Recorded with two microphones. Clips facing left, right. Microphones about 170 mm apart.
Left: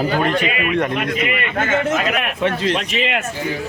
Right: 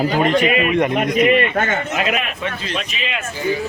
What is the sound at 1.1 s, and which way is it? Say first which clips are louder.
Speech: right 6 dB; 35° right (ahead or behind).